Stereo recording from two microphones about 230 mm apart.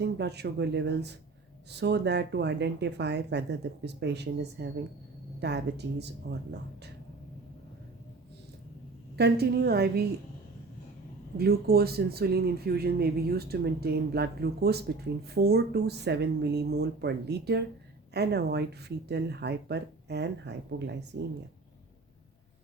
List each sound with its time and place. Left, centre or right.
0.0 s speech: right
9.1 s speech: right
11.3 s speech: right